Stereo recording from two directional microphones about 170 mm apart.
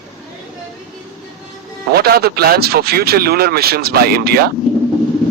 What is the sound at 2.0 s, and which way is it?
Speech, 65° right (ahead or behind).